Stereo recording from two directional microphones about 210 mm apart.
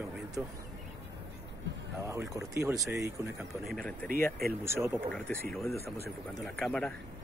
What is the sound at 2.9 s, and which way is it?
Speech, 10° right (ahead or behind).